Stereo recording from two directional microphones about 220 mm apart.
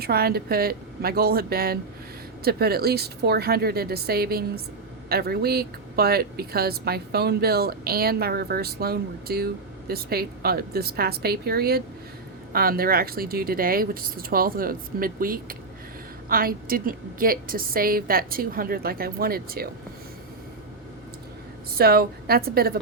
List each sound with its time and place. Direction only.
0.0 s a woman's voice: 45° right (ahead or behind)
21.8 s speech: 45° right (ahead or behind)